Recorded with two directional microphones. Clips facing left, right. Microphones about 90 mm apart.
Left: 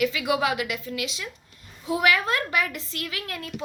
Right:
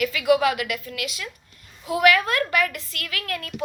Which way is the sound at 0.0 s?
25° left (ahead or behind).